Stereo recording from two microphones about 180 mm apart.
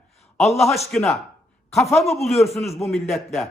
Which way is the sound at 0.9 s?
5° left (ahead or behind).